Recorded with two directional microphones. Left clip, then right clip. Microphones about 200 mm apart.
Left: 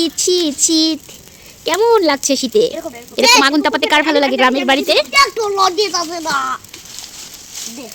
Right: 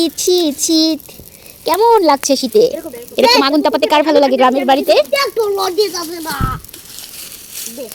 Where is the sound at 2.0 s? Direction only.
5° right (ahead or behind).